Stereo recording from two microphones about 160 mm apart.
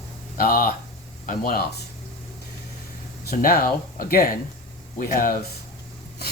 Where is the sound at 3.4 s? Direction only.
65° left (ahead or behind).